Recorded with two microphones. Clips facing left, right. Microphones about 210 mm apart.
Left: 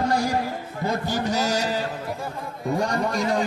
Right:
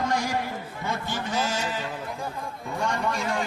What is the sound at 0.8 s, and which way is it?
A man's voice, 40° left (ahead or behind).